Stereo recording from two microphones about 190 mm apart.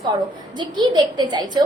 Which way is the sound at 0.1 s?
25° right (ahead or behind).